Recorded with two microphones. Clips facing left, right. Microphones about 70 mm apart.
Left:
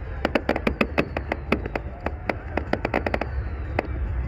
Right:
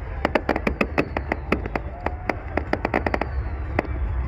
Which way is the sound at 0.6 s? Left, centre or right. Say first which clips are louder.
Even; centre.